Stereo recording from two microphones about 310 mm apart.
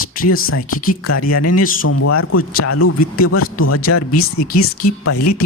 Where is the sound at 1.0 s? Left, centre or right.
Left.